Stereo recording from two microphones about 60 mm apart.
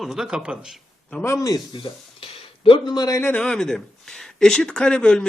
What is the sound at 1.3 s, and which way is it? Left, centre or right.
Speech, left.